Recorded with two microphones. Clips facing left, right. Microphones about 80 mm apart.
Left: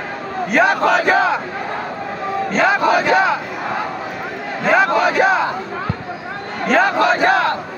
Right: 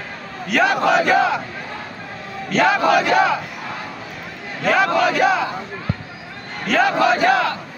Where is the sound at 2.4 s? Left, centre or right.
Left.